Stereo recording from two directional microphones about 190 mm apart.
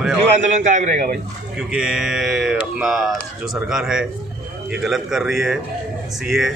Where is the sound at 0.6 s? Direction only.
40° right (ahead or behind).